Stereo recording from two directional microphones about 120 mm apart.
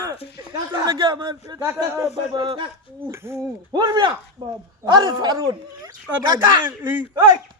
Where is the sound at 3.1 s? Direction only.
20° right (ahead or behind).